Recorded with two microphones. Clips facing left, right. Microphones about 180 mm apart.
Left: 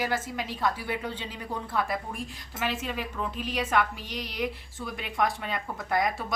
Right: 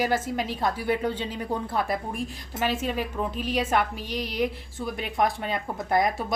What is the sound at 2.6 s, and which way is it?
A woman's voice, 35° right (ahead or behind).